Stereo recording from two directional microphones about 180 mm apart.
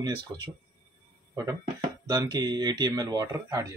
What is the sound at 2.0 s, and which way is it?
Speech, 20° right (ahead or behind).